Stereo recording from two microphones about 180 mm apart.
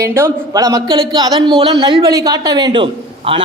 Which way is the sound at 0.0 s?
15° right (ahead or behind).